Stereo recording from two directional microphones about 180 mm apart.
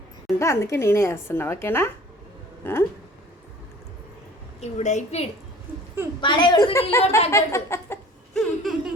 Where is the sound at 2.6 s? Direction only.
10° left (ahead or behind).